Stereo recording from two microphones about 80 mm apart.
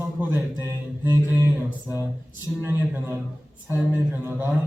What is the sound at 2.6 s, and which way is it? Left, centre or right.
A man's voice, right.